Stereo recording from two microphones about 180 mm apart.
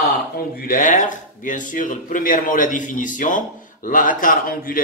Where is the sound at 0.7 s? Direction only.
45° left (ahead or behind).